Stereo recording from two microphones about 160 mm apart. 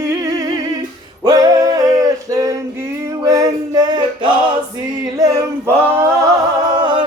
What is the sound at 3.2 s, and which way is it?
Male singing, 20° right (ahead or behind).